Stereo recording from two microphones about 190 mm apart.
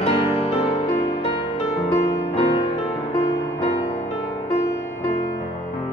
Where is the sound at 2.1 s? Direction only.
35° left (ahead or behind).